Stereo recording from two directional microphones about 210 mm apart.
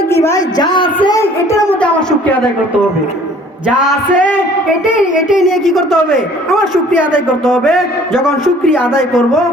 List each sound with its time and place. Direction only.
0.1 s a man's voice: 15° left (ahead or behind)
3.8 s a man's voice: centre (ahead or behind)